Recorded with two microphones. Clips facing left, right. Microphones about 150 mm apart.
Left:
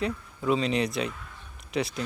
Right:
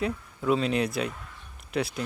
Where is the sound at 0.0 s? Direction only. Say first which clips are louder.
Even; centre (ahead or behind).